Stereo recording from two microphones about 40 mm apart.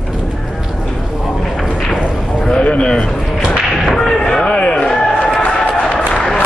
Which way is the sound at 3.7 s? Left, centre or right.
Centre.